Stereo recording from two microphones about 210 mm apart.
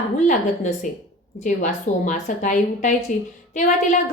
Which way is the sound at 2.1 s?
35° left (ahead or behind).